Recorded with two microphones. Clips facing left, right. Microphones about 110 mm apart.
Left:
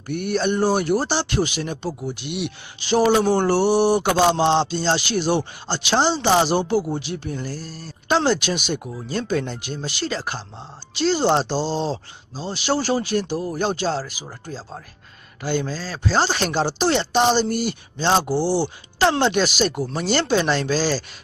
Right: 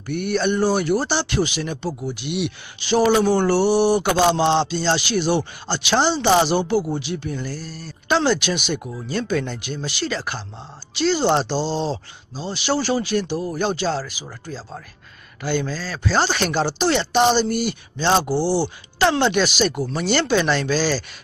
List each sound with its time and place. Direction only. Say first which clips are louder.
0.0 s speech: right 1 dB; 35° left (ahead or behind)
3.0 s speech: even; 20° left (ahead or behind)
3.6 s speech: even; 45° left (ahead or behind)
18.3 s speech: even; 15° left (ahead or behind)
18.9 s speech: even; 35° left (ahead or behind)